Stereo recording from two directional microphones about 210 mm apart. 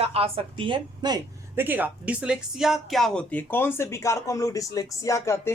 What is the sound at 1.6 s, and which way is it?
Speech, 10° right (ahead or behind).